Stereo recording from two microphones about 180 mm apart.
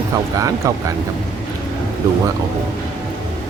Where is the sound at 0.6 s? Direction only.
15° right (ahead or behind).